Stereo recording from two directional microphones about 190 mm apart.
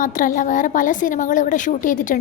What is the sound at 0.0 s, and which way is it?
A woman's voice, 45° left (ahead or behind).